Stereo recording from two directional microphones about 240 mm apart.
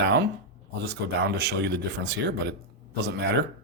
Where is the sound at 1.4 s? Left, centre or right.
Right.